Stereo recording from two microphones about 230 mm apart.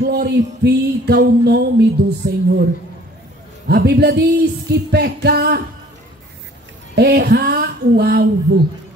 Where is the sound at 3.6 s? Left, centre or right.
Right.